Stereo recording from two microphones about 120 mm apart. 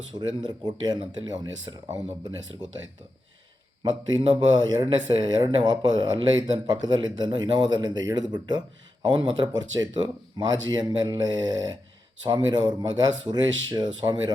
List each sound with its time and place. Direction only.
0.1 s speech: 40° right (ahead or behind)
4.2 s speech: 40° right (ahead or behind)